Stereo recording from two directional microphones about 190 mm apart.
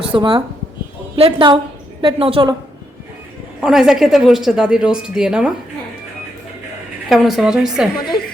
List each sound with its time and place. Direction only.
0.1 s a woman's voice: 25° right (ahead or behind)
3.6 s a woman's voice: 5° right (ahead or behind)
7.1 s a woman's voice: centre (ahead or behind)